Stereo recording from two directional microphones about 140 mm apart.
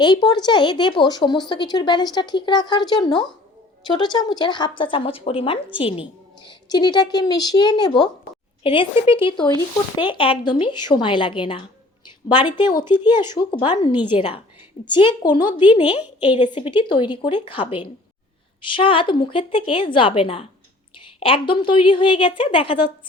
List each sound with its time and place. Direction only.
0.0 s a woman's voice: 30° left (ahead or behind)
15.8 s a woman's voice: 10° right (ahead or behind)
16.4 s speech: 35° left (ahead or behind)